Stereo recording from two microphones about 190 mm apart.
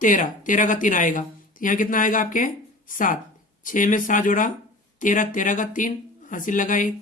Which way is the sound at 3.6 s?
45° left (ahead or behind).